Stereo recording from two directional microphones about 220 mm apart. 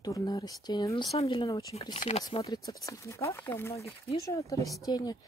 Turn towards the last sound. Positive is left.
turn(degrees=20)  # may be behind; listen again after turning